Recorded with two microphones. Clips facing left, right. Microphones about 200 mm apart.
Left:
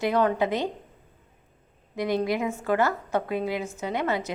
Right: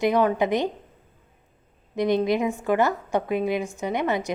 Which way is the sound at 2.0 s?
20° right (ahead or behind).